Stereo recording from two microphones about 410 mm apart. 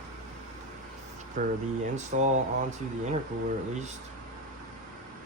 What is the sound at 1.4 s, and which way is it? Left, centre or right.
Speech, centre.